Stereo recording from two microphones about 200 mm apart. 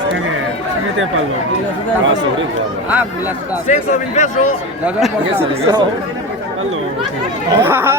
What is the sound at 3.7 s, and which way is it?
Speech, 40° left (ahead or behind).